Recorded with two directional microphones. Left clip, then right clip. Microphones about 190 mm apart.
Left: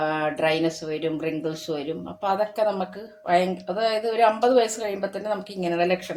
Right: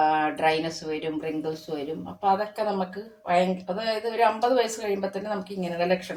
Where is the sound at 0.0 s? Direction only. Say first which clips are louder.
Right 1 dB; 40° left (ahead or behind).